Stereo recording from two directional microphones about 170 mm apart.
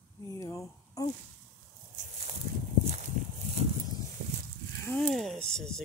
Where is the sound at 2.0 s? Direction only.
40° right (ahead or behind).